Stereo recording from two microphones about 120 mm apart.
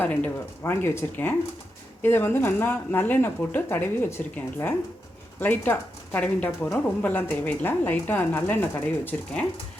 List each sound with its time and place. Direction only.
0.0 s speech: 15° left (ahead or behind)